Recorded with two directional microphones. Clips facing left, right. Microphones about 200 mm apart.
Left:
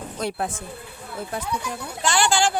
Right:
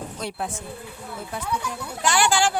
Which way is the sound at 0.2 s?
45° left (ahead or behind).